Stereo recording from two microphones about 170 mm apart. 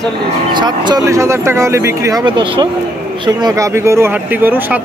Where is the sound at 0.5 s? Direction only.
25° right (ahead or behind).